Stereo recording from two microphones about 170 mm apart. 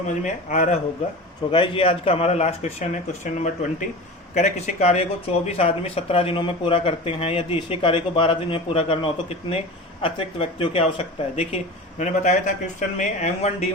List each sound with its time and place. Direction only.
0.1 s speech: 45° left (ahead or behind)
1.5 s speech: 30° left (ahead or behind)